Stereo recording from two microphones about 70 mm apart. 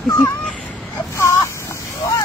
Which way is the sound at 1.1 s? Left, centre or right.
Left.